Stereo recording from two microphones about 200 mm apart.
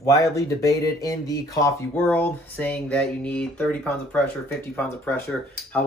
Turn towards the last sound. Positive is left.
turn(degrees=5)  # may be behind; listen again after turning